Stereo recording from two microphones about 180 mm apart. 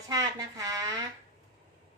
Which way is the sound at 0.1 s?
20° right (ahead or behind).